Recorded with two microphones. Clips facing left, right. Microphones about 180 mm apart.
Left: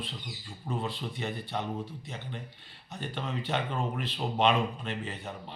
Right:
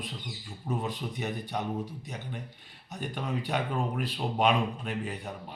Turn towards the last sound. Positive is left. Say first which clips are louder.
# right 2 dB
turn(degrees=-10)  # may be behind; listen again after turning